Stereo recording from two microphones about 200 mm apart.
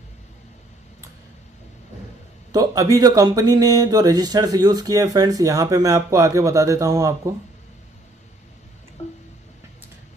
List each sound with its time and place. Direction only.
2.5 s speech: 15° right (ahead or behind)